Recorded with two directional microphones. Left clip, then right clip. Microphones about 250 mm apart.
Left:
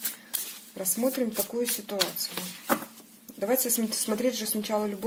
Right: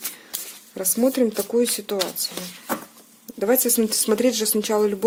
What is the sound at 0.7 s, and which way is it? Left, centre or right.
Speech, right.